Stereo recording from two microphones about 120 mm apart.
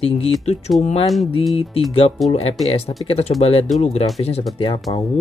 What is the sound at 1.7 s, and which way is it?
Speech, 55° left (ahead or behind).